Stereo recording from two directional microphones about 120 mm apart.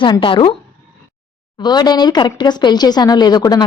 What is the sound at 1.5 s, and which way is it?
A woman's voice, 35° left (ahead or behind).